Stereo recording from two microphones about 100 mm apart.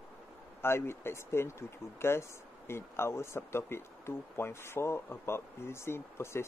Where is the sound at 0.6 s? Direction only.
25° left (ahead or behind).